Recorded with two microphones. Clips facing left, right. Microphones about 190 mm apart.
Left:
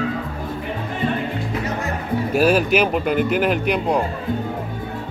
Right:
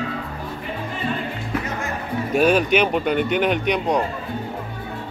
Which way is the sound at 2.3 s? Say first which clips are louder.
Even; 5° left (ahead or behind).